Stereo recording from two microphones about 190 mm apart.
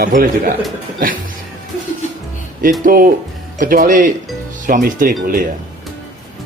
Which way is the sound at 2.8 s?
50° right (ahead or behind).